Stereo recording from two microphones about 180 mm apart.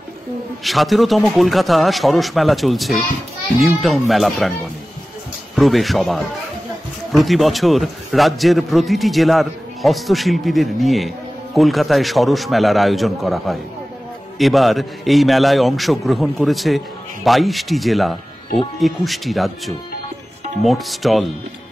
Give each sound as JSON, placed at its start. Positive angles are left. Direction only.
{"t": 0.7, "sound": "a man's voice", "side_deg": 0}
{"t": 5.6, "sound": "a man's voice", "side_deg": 0}